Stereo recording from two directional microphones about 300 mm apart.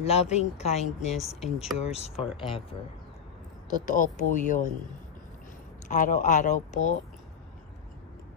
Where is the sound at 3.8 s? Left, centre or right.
Left.